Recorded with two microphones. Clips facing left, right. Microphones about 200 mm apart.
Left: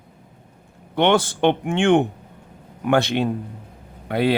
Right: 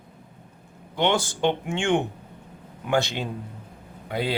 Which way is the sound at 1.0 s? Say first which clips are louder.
Left 5 dB; 60° left (ahead or behind).